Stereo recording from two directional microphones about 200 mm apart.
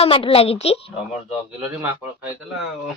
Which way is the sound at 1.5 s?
10° right (ahead or behind).